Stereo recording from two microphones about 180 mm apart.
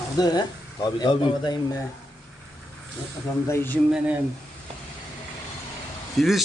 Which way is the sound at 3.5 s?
15° left (ahead or behind).